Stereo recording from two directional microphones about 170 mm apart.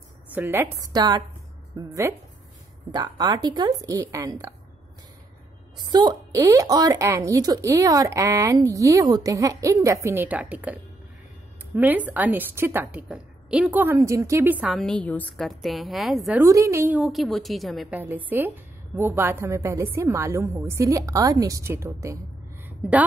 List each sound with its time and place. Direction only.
0.3 s a woman's voice: 10° right (ahead or behind)
5.9 s a woman's voice: 25° right (ahead or behind)
14.8 s a woman's voice: 5° left (ahead or behind)
16.3 s a woman's voice: 20° right (ahead or behind)
17.0 s a woman's voice: centre (ahead or behind); by 22.2 s 15° right (ahead or behind)
22.7 s a sound: 10° right (ahead or behind)